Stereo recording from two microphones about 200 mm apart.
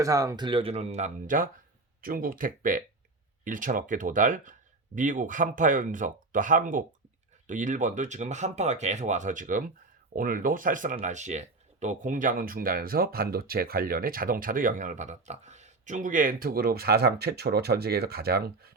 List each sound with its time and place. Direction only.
0.0 s speech: 15° right (ahead or behind); by 18.7 s 50° right (ahead or behind)